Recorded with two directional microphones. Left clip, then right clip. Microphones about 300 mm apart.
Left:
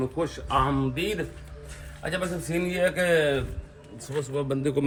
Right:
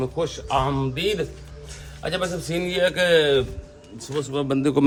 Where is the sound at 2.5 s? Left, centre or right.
Centre.